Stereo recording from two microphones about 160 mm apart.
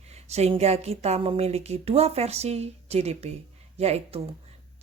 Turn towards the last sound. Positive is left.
turn(degrees=-40)  # may be behind; listen again after turning